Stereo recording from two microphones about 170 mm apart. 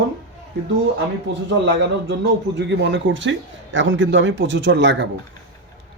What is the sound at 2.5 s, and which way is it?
Speech, 90° right.